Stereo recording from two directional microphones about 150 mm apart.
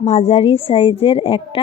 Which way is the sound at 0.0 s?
45° left (ahead or behind).